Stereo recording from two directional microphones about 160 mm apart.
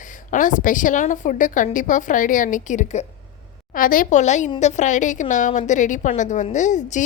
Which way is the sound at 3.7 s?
60° left (ahead or behind).